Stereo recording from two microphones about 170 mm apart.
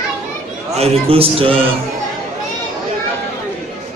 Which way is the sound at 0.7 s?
35° right (ahead or behind).